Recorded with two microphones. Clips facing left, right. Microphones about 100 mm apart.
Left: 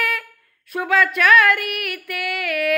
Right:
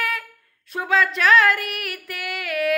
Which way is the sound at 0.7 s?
30° right (ahead or behind).